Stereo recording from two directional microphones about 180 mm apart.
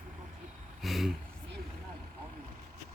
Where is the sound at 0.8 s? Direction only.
Centre (ahead or behind).